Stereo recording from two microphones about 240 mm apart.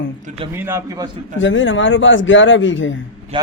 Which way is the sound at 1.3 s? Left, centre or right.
Left.